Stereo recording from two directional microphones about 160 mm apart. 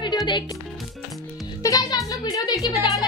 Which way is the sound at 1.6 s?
25° left (ahead or behind).